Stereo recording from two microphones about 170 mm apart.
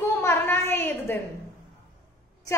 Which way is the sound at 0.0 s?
15° left (ahead or behind).